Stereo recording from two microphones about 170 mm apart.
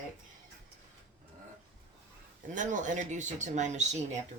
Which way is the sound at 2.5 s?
45° right (ahead or behind).